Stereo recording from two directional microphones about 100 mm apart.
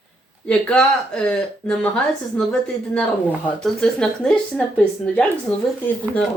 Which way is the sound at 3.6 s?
5° left (ahead or behind).